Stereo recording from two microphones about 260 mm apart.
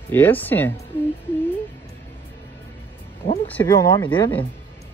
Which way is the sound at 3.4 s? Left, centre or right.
Centre.